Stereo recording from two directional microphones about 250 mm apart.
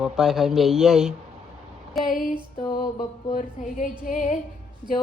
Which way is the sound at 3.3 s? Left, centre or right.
Left.